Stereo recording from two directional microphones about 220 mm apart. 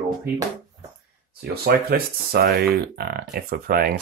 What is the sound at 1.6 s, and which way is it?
Speech, 45° right (ahead or behind).